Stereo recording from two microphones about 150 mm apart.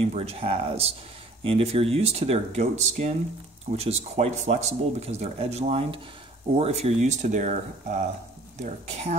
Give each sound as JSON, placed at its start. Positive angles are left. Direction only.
{"t": 0.0, "sound": "speech", "side_deg": -45}